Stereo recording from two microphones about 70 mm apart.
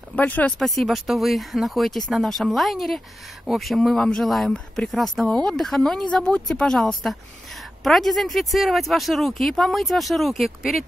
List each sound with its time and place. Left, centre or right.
0.1 s speech: left
0.6 s a woman's voice: centre